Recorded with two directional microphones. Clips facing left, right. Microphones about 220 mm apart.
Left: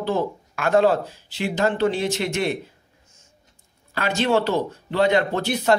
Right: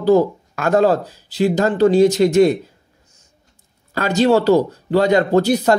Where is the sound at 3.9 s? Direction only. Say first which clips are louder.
Right 6 dB; 40° right (ahead or behind).